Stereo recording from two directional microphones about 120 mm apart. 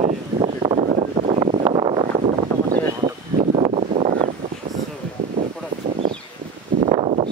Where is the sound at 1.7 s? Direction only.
45° right (ahead or behind).